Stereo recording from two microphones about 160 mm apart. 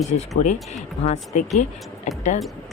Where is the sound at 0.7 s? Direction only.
45° left (ahead or behind).